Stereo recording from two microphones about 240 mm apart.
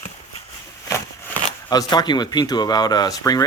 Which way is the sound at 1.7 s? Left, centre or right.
Centre.